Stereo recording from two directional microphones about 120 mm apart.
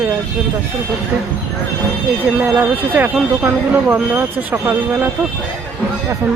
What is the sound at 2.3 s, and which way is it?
Speech, 15° right (ahead or behind).